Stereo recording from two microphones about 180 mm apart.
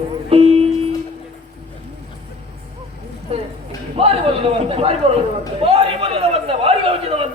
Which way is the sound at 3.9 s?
30° right (ahead or behind).